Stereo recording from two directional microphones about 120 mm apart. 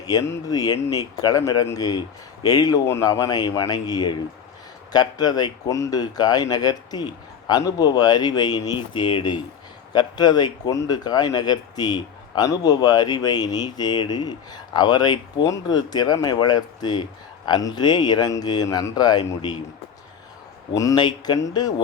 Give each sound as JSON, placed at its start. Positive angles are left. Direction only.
{"t": 0.1, "sound": "speech", "side_deg": 30}
{"t": 20.7, "sound": "speech", "side_deg": 35}